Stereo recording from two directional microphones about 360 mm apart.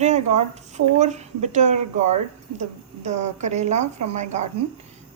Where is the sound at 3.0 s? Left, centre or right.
Centre.